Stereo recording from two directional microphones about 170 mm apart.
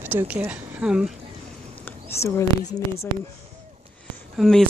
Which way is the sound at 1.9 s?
15° left (ahead or behind).